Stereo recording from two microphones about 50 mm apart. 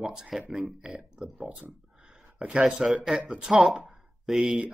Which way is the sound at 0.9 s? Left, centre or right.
Centre.